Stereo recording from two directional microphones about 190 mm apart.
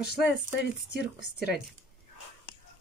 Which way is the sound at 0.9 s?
60° left (ahead or behind).